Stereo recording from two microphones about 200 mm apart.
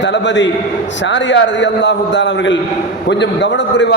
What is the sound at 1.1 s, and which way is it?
A man's voice, 65° left (ahead or behind).